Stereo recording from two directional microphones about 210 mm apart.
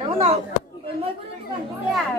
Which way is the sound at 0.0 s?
25° right (ahead or behind).